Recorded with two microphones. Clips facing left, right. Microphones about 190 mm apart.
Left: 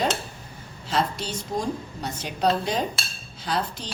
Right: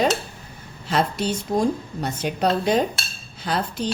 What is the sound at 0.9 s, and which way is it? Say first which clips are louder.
Dishes: right 4 dB; 60° right (ahead or behind).